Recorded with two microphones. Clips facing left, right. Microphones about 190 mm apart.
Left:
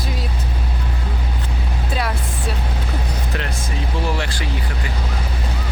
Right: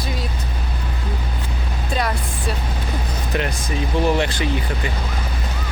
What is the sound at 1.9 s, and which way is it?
Speech, 5° left (ahead or behind).